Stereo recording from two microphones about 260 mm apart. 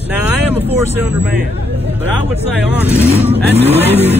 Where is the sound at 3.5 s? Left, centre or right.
Right.